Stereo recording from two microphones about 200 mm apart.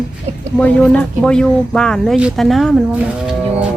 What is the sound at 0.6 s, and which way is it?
Speech, 5° left (ahead or behind).